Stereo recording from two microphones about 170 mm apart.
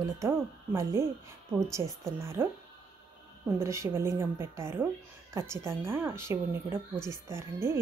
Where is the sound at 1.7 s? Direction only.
15° right (ahead or behind).